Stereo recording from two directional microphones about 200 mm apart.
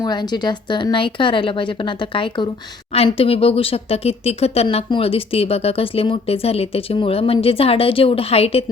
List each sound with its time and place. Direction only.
0.0 s speech: 20° left (ahead or behind)